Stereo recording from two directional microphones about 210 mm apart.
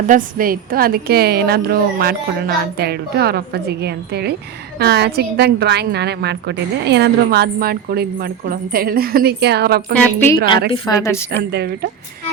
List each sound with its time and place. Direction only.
0.1 s a woman's voice: 40° right (ahead or behind)
9.9 s a woman's voice: 10° left (ahead or behind)
11.5 s a woman's voice: 50° right (ahead or behind)